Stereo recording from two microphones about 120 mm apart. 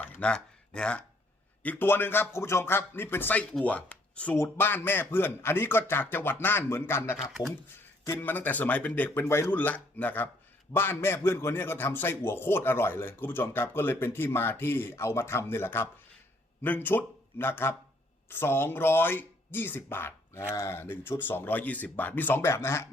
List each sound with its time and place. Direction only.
0.2 s a man's voice: 10° left (ahead or behind)